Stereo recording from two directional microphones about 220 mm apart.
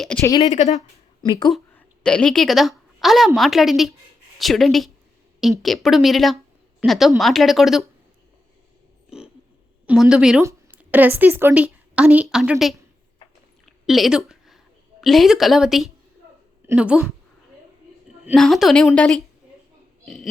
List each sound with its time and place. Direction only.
0.0 s speech: 5° left (ahead or behind)
0.3 s speech: 15° left (ahead or behind)
0.5 s speech: 30° left (ahead or behind)
1.2 s speech: 20° left (ahead or behind)
1.5 s a woman's voice: centre (ahead or behind)
9.0 s a sound: 5° right (ahead or behind)
9.8 s speech: 5° right (ahead or behind)
13.7 s a sound: centre (ahead or behind)
15.0 s speech: centre (ahead or behind)
18.3 s speech: centre (ahead or behind)